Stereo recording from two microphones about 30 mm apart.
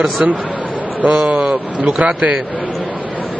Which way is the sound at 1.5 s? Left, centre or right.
Right.